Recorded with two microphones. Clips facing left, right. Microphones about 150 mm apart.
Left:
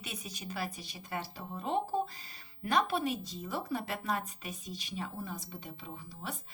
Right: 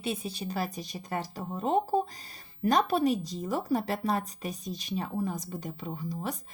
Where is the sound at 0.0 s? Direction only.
30° right (ahead or behind).